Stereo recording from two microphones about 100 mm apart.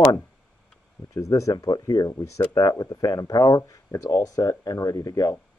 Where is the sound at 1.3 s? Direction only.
35° left (ahead or behind).